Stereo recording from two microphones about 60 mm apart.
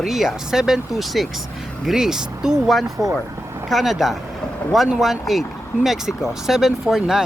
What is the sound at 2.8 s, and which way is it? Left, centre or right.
Speech, right.